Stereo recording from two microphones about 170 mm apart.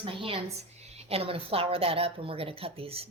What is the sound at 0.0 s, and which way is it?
A woman's voice, 30° right (ahead or behind).